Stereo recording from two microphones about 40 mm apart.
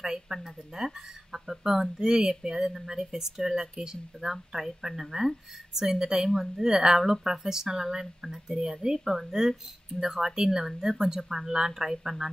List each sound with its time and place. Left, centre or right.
0.0 s speech: centre